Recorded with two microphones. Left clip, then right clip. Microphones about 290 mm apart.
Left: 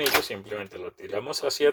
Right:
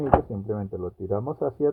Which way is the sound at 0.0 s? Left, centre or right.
Left.